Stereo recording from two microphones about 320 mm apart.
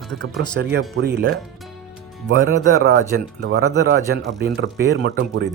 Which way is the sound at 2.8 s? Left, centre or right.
Right.